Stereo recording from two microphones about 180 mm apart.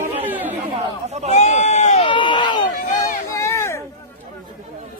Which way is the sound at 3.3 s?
15° left (ahead or behind).